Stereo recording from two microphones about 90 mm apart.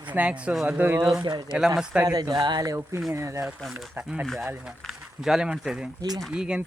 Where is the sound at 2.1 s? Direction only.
45° right (ahead or behind).